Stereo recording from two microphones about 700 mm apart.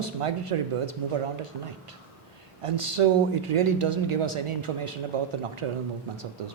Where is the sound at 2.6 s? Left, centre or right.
Right.